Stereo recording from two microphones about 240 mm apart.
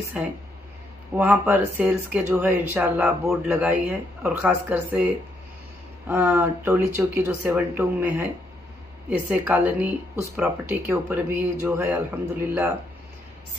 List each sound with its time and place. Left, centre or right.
0.2 s speech: centre
9.3 s speech: centre